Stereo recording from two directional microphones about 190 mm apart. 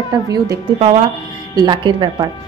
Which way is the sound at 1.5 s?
25° right (ahead or behind).